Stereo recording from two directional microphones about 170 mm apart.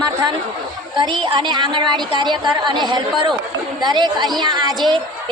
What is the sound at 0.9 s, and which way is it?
A woman's voice, 25° right (ahead or behind).